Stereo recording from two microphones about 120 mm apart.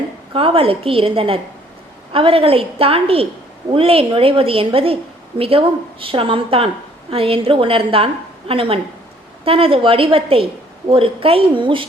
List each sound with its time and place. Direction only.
0.3 s a woman's voice: 50° right (ahead or behind)